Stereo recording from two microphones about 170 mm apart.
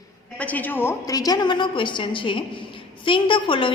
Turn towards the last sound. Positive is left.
turn(degrees=30)  # may be behind; listen again after turning